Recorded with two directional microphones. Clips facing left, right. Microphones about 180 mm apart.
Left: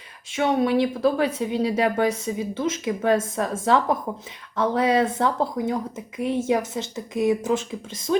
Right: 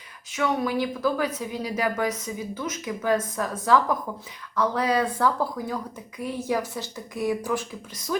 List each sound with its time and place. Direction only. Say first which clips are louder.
0.3 s speech: left 5 dB; 25° left (ahead or behind)